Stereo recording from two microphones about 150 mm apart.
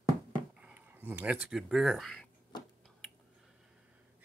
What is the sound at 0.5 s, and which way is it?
Speech, 10° right (ahead or behind).